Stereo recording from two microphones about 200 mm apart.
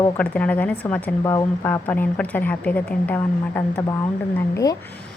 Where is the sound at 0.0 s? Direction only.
5° left (ahead or behind).